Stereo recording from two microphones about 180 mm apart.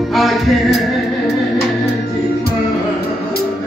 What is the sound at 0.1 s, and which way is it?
Music, centre (ahead or behind).